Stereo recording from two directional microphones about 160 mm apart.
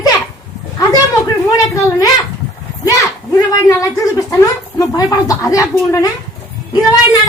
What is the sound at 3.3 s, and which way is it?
Speech, 20° left (ahead or behind).